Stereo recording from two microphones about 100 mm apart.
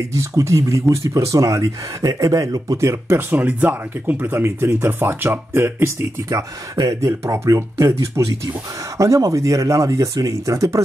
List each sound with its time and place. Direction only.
0.1 s speech: 30° right (ahead or behind)